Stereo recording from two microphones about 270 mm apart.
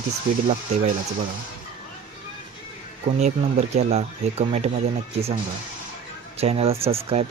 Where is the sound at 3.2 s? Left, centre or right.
Right.